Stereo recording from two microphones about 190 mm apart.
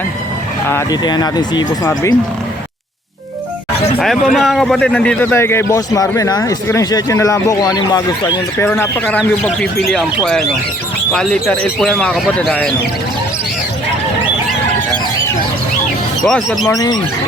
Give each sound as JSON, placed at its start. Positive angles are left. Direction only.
{"t": 0.7, "sound": "speech", "side_deg": 15}
{"t": 3.9, "sound": "a man's voice", "side_deg": 0}
{"t": 11.1, "sound": "speech", "side_deg": 5}
{"t": 16.2, "sound": "speech", "side_deg": 0}
{"t": 16.6, "sound": "speech", "side_deg": 20}